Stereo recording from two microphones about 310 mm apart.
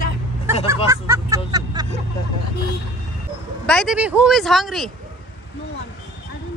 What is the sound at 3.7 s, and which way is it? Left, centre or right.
Speech, centre.